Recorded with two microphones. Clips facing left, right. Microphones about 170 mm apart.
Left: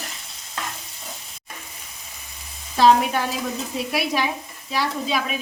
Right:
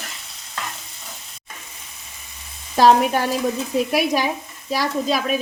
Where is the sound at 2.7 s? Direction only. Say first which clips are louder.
Right 2 dB; 45° right (ahead or behind).